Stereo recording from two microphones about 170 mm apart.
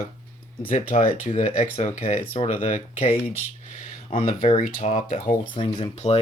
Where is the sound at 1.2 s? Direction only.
40° left (ahead or behind).